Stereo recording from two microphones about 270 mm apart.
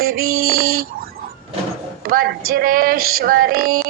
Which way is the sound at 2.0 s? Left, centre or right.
Right.